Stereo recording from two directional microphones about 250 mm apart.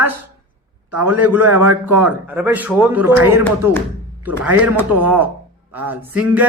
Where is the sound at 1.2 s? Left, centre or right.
Centre.